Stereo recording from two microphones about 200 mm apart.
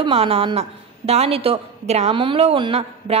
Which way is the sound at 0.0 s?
30° right (ahead or behind).